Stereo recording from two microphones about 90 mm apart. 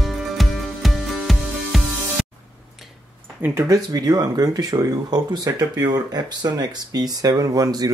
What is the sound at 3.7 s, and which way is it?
Speech, 45° right (ahead or behind).